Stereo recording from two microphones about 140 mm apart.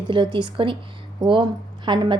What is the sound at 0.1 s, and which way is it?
A woman's voice, 35° right (ahead or behind).